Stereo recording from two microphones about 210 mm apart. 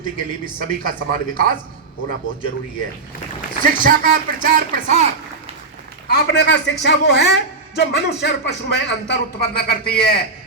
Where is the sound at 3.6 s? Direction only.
40° right (ahead or behind).